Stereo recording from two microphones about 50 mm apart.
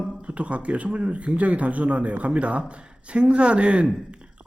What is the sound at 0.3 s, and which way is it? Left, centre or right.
Speech, right.